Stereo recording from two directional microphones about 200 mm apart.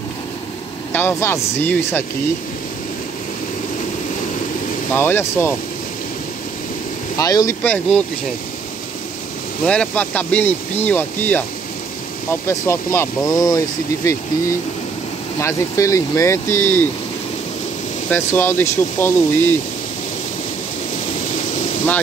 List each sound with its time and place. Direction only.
0.9 s speech: 10° left (ahead or behind)
4.9 s speech: 10° left (ahead or behind)
7.2 s speech: 15° left (ahead or behind)
9.7 s speech: 5° left (ahead or behind)
15.4 s speech: 15° left (ahead or behind)
18.1 s speech: 10° left (ahead or behind)